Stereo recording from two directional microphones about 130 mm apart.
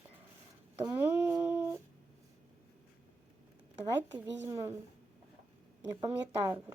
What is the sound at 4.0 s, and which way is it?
Speech, 15° right (ahead or behind).